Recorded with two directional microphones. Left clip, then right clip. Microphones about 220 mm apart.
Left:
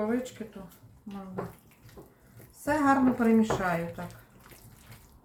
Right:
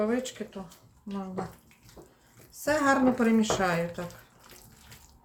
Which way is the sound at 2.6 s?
40° right (ahead or behind).